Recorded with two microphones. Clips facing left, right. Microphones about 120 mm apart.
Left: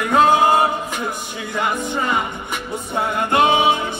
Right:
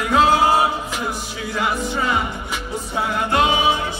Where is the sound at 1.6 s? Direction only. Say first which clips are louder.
Left 1 dB; 5° right (ahead or behind).